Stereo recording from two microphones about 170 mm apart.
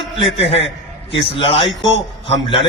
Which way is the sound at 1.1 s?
30° left (ahead or behind).